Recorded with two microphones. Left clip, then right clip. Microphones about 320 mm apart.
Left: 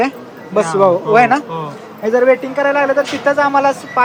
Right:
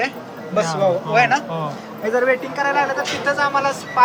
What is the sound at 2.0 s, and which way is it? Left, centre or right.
Speech, left.